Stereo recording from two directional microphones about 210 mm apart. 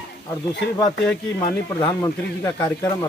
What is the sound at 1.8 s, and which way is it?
Speech, 15° left (ahead or behind).